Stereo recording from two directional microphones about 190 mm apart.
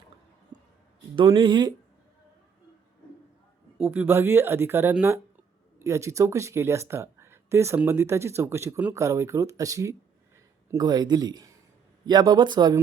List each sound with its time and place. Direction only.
0.5 s a sound: 20° right (ahead or behind)
1.1 s a man's voice: 25° right (ahead or behind)
3.8 s a man's voice: 10° right (ahead or behind)